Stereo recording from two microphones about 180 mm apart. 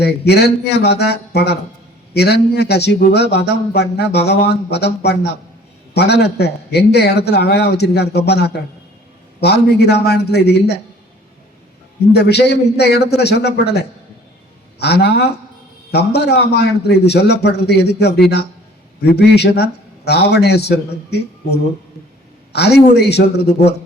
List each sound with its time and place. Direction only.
0.0 s speech: 65° left (ahead or behind)
12.1 s speech: 65° left (ahead or behind)